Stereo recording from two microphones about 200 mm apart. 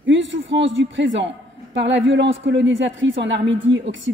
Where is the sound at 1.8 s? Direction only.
65° right (ahead or behind).